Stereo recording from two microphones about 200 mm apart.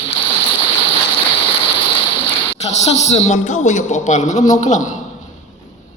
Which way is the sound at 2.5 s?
35° left (ahead or behind).